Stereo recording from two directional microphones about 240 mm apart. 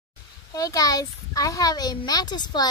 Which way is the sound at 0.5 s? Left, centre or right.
Centre.